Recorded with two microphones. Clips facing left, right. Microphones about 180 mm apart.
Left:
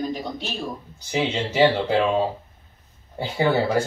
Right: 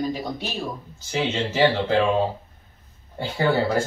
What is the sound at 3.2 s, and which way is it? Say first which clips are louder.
Speech: left 1 dB; 15° left (ahead or behind).